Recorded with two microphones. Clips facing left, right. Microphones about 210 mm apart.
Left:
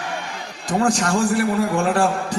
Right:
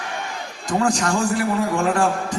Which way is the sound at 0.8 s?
35° left (ahead or behind).